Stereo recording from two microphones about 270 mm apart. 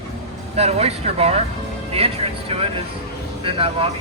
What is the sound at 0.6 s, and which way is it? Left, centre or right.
Speech, right.